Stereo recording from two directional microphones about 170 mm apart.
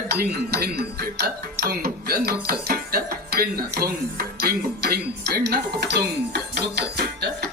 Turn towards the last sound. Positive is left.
turn(degrees=-70)  # may be behind; listen again after turning